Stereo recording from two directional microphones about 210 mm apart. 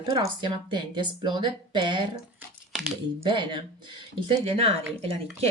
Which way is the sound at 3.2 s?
20° right (ahead or behind).